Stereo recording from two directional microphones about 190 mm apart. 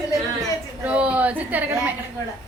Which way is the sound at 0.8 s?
5° right (ahead or behind).